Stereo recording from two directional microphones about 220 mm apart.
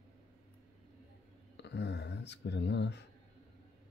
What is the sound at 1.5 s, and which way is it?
Speech, 50° left (ahead or behind).